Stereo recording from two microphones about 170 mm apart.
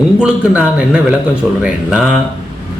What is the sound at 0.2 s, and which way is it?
A man's voice, 5° right (ahead or behind).